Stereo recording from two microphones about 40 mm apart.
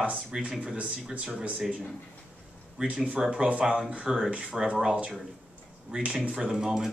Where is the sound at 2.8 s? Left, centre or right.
Right.